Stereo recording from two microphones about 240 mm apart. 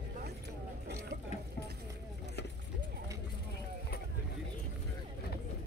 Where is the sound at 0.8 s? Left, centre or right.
Right.